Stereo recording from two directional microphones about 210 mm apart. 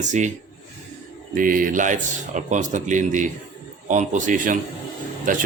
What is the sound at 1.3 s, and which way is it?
Speech, 40° right (ahead or behind).